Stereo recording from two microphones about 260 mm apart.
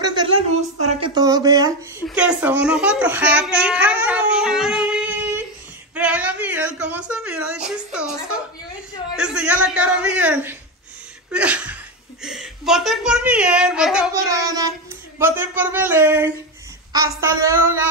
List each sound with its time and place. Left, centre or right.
0.0 s a sound: centre
1.1 s a child's voice: centre
14.3 s speech: centre